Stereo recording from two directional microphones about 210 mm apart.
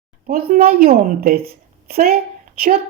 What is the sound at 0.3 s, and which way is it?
Speech, 45° right (ahead or behind).